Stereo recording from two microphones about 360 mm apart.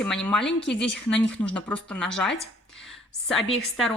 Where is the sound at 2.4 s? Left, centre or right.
Centre.